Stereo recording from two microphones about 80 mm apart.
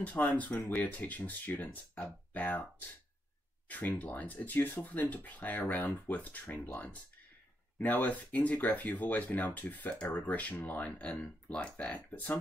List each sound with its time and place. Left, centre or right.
0.0 s speech: centre
7.8 s speech: left